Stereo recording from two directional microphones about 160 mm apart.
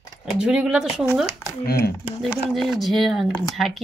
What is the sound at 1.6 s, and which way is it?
Speech, 80° left.